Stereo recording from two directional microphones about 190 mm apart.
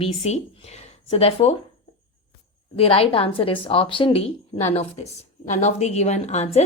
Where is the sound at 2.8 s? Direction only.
30° left (ahead or behind).